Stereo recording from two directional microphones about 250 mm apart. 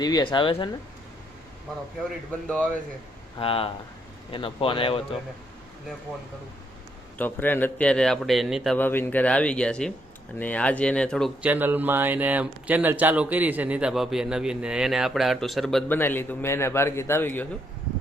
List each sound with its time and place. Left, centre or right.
0.0 s speech: centre
3.3 s speech: left
7.2 s speech: centre